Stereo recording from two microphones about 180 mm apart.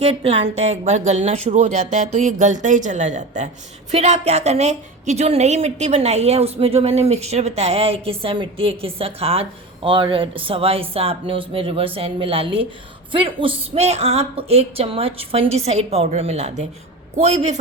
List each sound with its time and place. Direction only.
0.0 s a woman's voice: 35° right (ahead or behind)